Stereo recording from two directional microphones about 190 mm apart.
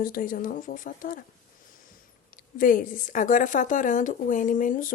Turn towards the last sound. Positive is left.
turn(degrees=45)  # may be behind; listen again after turning